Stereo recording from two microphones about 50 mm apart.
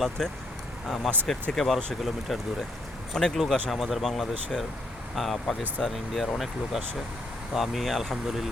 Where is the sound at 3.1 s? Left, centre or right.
Centre.